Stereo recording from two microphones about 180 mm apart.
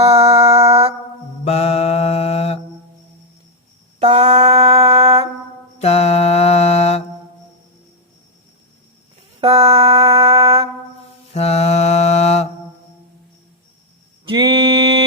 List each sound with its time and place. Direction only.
0.0 s music: 35° right (ahead or behind)
1.5 s mantra: 35° left (ahead or behind)
4.0 s mantra: 40° right (ahead or behind)
5.8 s mantra: 35° left (ahead or behind)
9.4 s a sound: 35° right (ahead or behind)
11.3 s mantra: 35° left (ahead or behind)
14.3 s mantra: 25° right (ahead or behind)